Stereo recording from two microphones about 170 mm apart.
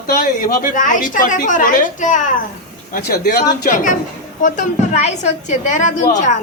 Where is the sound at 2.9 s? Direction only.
60° left (ahead or behind).